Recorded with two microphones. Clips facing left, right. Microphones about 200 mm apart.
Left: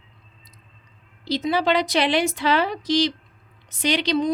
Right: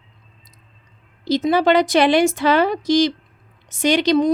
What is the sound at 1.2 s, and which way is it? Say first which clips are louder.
A woman's voice: right 6 dB; 45° right (ahead or behind).